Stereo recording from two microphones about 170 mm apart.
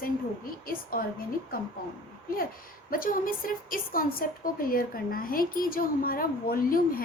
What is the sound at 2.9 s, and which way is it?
A woman's voice, 55° left (ahead or behind).